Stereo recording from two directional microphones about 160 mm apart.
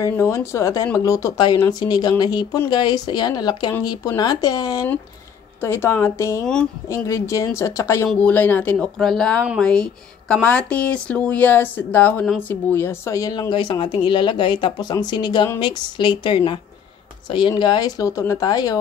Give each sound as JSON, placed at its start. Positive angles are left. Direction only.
{"t": 0.0, "sound": "speech", "side_deg": 15}